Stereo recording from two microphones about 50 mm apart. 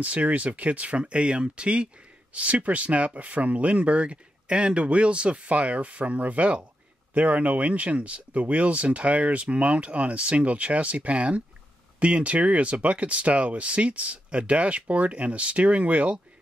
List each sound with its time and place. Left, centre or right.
0.0 s speech: right